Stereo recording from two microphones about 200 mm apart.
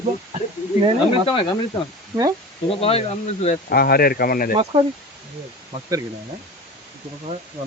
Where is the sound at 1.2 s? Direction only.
25° left (ahead or behind).